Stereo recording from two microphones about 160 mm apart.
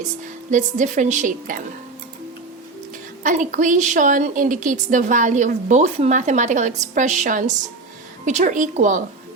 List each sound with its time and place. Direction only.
0.5 s a woman's voice: 50° right (ahead or behind)
3.2 s a woman's voice: 50° right (ahead or behind)